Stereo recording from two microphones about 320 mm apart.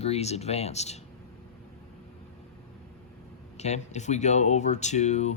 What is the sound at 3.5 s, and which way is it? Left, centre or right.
Speech, left.